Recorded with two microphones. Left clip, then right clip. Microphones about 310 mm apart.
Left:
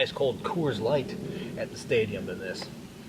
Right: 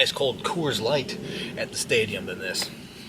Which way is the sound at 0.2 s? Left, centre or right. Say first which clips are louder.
Right 2 dB; centre.